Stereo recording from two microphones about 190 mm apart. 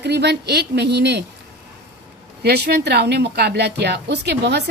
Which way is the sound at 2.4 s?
60° right (ahead or behind).